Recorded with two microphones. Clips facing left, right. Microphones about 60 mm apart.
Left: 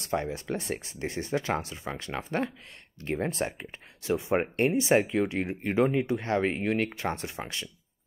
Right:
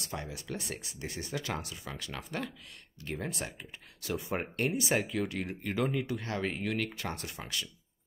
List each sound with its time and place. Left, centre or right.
0.0 s speech: left